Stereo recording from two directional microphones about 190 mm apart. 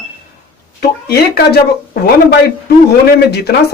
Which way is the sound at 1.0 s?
55° left (ahead or behind).